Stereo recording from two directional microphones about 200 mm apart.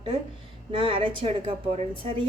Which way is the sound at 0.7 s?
25° right (ahead or behind).